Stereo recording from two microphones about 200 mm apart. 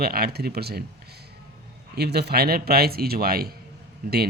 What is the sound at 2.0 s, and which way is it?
Speech, 55° right (ahead or behind).